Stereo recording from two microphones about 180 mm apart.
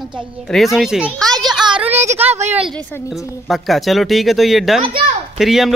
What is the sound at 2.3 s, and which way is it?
Speech, 40° right (ahead or behind).